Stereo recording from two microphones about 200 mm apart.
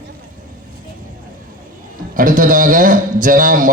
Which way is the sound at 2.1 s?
45° right (ahead or behind).